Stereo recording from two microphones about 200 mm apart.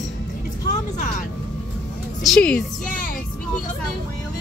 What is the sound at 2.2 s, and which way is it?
Speech, 5° left (ahead or behind).